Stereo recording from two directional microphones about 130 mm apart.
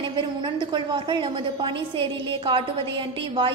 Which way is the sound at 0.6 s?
40° right (ahead or behind).